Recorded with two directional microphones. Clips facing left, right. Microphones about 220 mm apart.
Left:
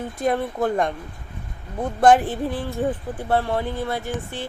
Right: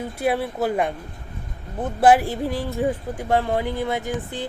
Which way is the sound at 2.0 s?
10° right (ahead or behind).